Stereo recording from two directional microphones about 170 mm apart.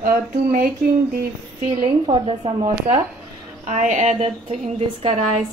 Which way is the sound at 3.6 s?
45° right (ahead or behind).